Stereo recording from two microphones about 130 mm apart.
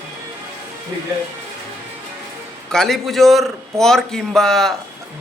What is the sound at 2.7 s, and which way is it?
A man's voice, 5° left (ahead or behind).